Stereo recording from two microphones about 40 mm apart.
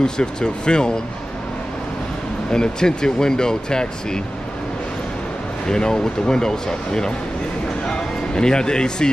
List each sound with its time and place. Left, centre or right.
0.0 s speech: left
2.5 s speech: centre
5.7 s speech: centre